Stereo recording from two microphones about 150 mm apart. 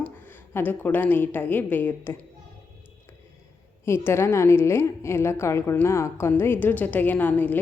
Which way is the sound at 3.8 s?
15° left (ahead or behind).